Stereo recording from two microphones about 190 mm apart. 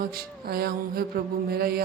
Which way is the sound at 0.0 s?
55° right (ahead or behind).